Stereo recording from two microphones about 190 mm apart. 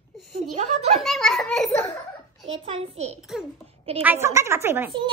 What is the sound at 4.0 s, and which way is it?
Speech, 10° right (ahead or behind).